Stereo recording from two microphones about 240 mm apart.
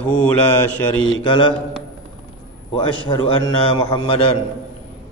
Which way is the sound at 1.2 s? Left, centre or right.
Centre.